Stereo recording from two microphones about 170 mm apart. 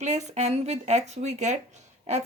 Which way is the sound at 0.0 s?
40° right (ahead or behind).